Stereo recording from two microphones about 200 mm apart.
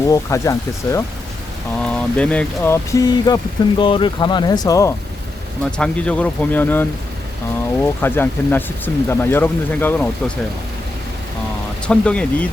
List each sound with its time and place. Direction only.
0.1 s speech: 15° left (ahead or behind)
1.8 s speech: 5° left (ahead or behind)
5.7 s speech: 5° left (ahead or behind)
11.9 s speech: 5° left (ahead or behind)